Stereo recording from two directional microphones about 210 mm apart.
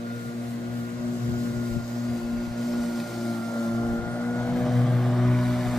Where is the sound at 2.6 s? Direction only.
Centre (ahead or behind).